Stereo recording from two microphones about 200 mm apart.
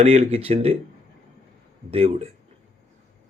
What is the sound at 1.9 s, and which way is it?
Speech, 30° right (ahead or behind).